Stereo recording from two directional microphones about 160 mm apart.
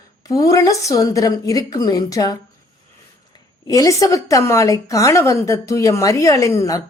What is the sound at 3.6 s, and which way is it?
A woman's voice, 20° left (ahead or behind).